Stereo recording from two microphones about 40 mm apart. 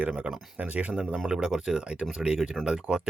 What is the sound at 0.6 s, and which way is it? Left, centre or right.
Speech, right.